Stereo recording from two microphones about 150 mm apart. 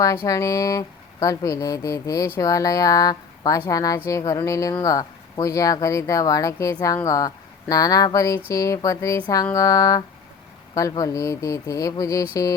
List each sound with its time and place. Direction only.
0.3 s speech: 20° left (ahead or behind)